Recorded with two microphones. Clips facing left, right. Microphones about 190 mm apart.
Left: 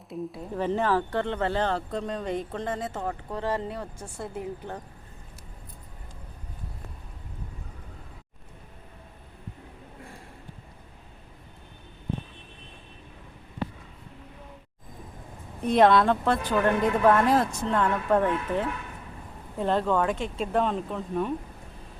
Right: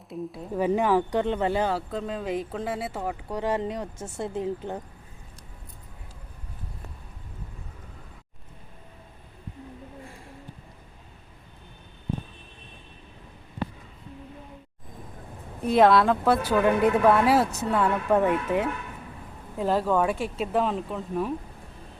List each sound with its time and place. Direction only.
0.1 s speech: centre (ahead or behind)
0.6 s speech: 10° right (ahead or behind)
15.6 s speech: centre (ahead or behind)